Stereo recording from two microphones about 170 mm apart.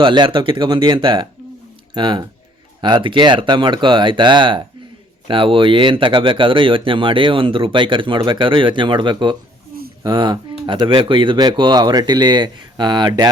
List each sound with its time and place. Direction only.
0.0 s speech: 25° right (ahead or behind)